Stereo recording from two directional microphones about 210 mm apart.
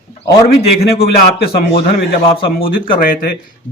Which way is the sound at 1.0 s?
45° left (ahead or behind).